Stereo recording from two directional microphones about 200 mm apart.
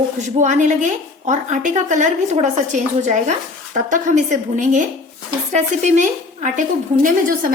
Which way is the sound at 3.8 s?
40° right (ahead or behind).